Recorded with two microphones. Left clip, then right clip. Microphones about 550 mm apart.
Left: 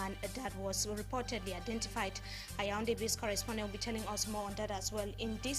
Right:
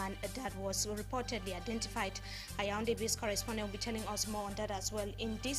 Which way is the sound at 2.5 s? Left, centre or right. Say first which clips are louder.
Even; right.